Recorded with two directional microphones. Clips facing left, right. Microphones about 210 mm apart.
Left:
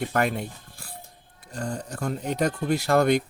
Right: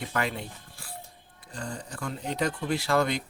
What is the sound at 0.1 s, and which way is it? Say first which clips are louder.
Speech: left 6 dB; 50° left (ahead or behind).